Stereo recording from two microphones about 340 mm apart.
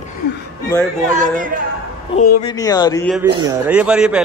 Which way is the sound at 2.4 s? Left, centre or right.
Centre.